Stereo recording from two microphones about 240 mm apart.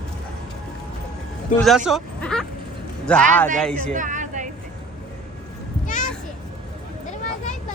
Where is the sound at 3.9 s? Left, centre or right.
Right.